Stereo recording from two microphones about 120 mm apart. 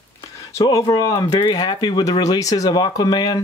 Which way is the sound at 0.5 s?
30° left (ahead or behind).